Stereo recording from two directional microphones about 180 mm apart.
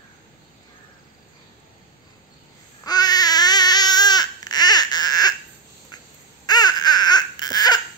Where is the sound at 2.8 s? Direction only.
20° left (ahead or behind).